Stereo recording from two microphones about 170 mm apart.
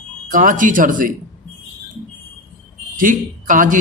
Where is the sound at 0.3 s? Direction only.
50° right (ahead or behind).